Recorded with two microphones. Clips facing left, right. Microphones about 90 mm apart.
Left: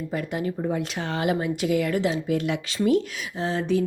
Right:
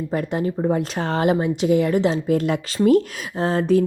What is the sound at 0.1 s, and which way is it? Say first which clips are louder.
Speech: right 5 dB; 35° right (ahead or behind).